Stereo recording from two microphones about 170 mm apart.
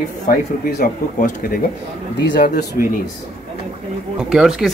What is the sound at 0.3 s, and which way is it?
Speech, 50° left (ahead or behind).